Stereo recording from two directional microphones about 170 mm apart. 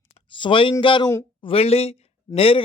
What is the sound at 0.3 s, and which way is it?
A man's voice, 30° left (ahead or behind).